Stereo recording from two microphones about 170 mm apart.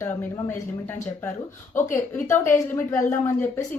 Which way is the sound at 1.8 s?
15° left (ahead or behind).